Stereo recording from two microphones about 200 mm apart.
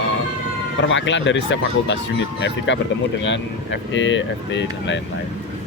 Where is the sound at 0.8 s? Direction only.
65° left (ahead or behind).